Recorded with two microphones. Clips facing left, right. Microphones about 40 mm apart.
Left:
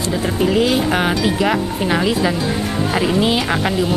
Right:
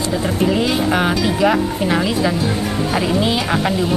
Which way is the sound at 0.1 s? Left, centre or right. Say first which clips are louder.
Left 1 dB; centre.